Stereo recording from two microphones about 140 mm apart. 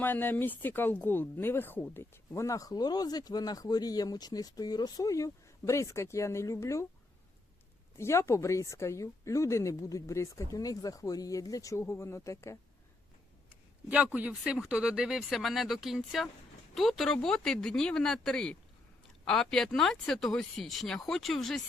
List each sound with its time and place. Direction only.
0.0 s speech: 15° left (ahead or behind)
7.9 s speech: 20° left (ahead or behind)
13.8 s speech: 10° right (ahead or behind)